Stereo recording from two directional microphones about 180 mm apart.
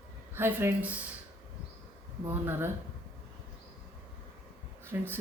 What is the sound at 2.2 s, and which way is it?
Speech, 10° right (ahead or behind).